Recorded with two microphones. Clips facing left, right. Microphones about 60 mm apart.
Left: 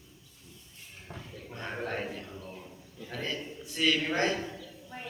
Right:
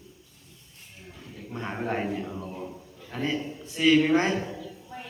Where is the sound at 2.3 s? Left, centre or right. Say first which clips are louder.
Right 7 dB; right.